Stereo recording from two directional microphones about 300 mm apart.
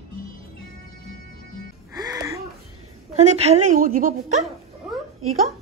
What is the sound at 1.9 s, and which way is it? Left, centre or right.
Music, centre.